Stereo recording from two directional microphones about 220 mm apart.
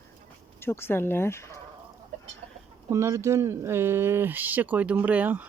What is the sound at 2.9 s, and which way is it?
Speech, 10° right (ahead or behind).